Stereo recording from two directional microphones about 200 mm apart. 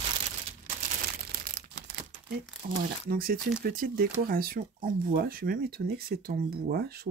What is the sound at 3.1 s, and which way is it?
Speech, 45° right (ahead or behind).